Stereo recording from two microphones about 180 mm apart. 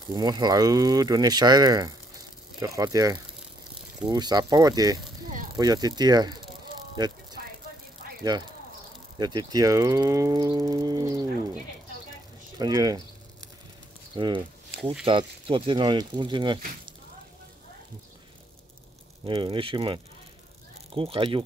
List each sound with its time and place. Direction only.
0.1 s speech: 25° right (ahead or behind)
8.2 s speech: 25° right (ahead or behind)
12.5 s speech: 20° right (ahead or behind)
14.1 s speech: 25° right (ahead or behind)
19.2 s speech: 30° right (ahead or behind)